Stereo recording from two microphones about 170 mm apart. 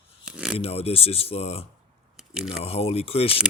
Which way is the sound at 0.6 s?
35° left (ahead or behind).